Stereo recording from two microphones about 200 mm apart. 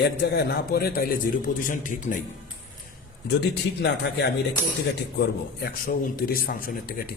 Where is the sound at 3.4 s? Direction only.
60° left (ahead or behind).